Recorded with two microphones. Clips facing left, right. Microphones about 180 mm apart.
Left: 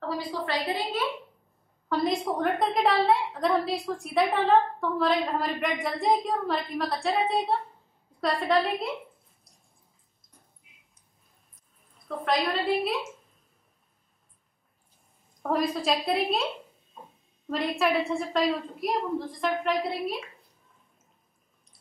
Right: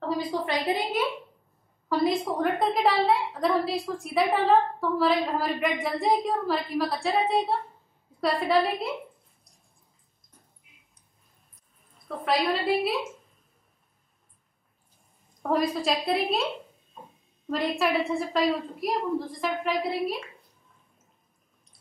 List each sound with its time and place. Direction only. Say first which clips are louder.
0.3 s a woman's voice: right 2 dB; 15° right (ahead or behind)
1.9 s a woman's voice: right 2 dB; centre (ahead or behind)
12.3 s a woman's voice: right 1 dB; 5° right (ahead or behind)
15.5 s a woman's voice: right 1 dB; centre (ahead or behind)
17.5 s a woman's voice: even; centre (ahead or behind)